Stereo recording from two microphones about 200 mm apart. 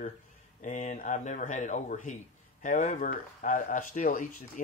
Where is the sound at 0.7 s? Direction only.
40° left (ahead or behind).